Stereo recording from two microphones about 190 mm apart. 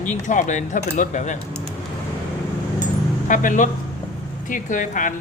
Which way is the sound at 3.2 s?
40° left (ahead or behind).